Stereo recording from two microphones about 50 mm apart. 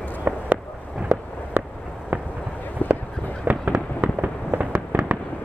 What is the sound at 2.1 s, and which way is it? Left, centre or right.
Fireworks, right.